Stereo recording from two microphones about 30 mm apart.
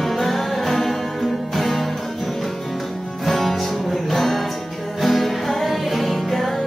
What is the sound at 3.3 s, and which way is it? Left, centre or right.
Music, centre.